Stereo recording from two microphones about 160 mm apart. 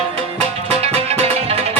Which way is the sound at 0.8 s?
40° right (ahead or behind).